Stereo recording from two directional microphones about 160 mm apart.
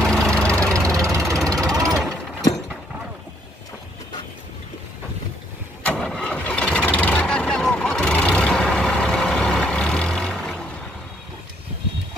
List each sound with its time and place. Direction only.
0.0 s engine: 5° left (ahead or behind)
0.9 s engine: 20° right (ahead or behind)
1.3 s vehicle: 5° left (ahead or behind)
1.9 s jackhammer: centre (ahead or behind)
5.9 s engine starting: 5° left (ahead or behind)